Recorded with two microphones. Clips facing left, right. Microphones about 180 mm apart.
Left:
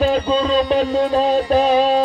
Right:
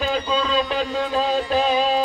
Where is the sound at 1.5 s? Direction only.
55° left (ahead or behind).